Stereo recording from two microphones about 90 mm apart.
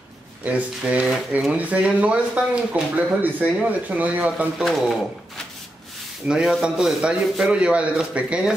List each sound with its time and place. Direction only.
0.5 s a man's voice: 15° right (ahead or behind)
4.6 s speech: centre (ahead or behind)
6.2 s a man's voice: 5° right (ahead or behind)